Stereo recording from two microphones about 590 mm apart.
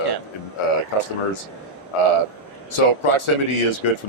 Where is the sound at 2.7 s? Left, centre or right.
Left.